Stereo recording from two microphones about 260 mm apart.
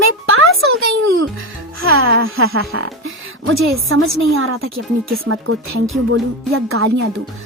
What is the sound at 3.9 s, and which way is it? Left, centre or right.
Speech, right.